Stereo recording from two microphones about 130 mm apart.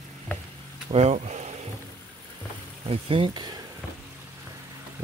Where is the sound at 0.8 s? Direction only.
55° right (ahead or behind).